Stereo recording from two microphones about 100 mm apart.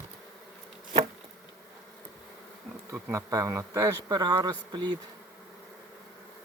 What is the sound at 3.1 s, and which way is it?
Speech, 35° right (ahead or behind).